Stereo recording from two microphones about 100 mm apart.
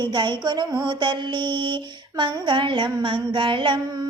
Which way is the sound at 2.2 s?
55° right (ahead or behind).